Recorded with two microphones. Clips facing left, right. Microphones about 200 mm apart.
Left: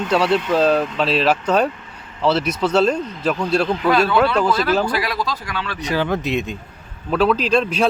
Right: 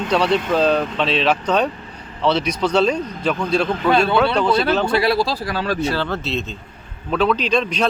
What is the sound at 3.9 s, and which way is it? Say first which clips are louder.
Speech: even; 25° right (ahead or behind).